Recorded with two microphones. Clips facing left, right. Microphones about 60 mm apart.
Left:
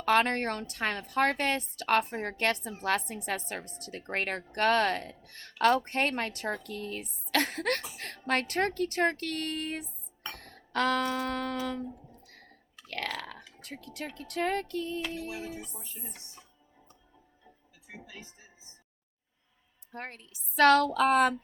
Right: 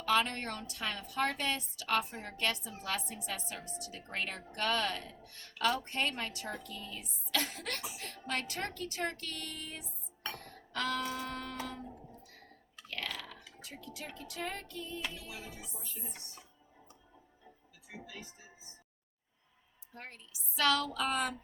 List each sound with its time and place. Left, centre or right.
0.0 s a woman's voice: left
10.3 s a sound: left
12.2 s tick: left
12.9 s burping: left
14.2 s music: left
15.3 s music: left
19.9 s a woman's voice: left